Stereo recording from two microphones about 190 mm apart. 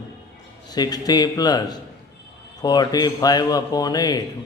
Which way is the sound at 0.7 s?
20° left (ahead or behind).